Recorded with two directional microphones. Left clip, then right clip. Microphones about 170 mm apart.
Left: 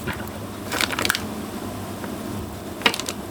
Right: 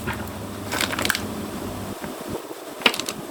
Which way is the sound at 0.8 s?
35° left (ahead or behind).